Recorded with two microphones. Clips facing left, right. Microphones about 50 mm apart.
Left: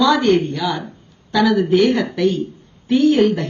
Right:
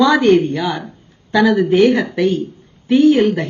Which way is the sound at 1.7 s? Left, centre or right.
Right.